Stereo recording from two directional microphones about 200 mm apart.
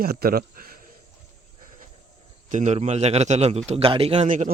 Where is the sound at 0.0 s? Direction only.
50° right (ahead or behind).